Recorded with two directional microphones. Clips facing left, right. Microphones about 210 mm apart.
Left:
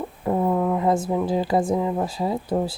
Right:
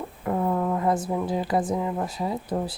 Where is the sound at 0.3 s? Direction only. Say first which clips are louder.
Left 3 dB; 20° left (ahead or behind).